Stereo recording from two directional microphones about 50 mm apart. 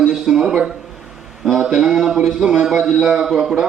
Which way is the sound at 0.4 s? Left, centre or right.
Centre.